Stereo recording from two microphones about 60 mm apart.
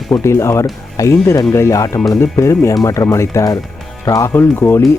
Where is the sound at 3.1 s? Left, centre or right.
Left.